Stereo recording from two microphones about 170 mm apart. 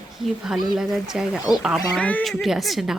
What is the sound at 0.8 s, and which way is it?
A woman's voice, 5° right (ahead or behind).